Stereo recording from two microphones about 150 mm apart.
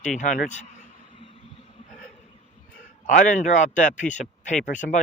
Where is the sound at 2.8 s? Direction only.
60° left (ahead or behind).